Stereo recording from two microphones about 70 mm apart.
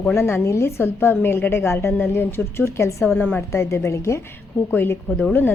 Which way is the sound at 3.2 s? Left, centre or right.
Left.